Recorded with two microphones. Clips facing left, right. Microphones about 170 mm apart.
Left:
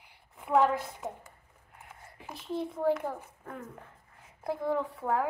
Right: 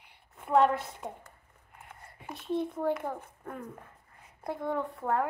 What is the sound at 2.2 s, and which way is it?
A child's voice, centre (ahead or behind).